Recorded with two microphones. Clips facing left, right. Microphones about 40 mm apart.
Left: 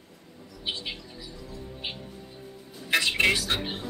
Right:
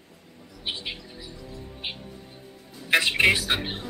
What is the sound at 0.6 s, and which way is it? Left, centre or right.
Speech, right.